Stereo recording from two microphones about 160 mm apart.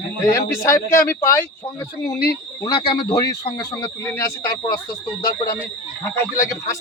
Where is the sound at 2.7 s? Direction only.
30° left (ahead or behind).